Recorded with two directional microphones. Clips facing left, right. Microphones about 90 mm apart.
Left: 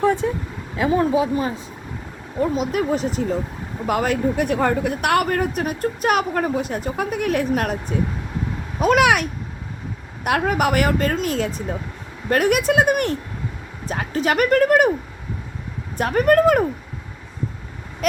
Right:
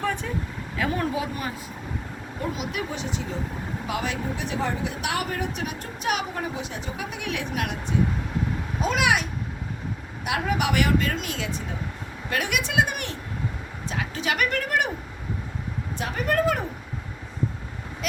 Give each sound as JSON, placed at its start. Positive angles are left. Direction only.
{"t": 0.0, "sound": "vehicle", "side_deg": 20}
{"t": 0.8, "sound": "speech", "side_deg": 20}
{"t": 2.4, "sound": "speech", "side_deg": 40}
{"t": 8.8, "sound": "speech", "side_deg": 55}
{"t": 10.2, "sound": "speech", "side_deg": 55}
{"t": 16.0, "sound": "speech", "side_deg": 50}